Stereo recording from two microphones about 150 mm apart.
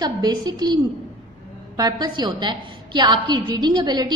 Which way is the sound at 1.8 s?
25° right (ahead or behind).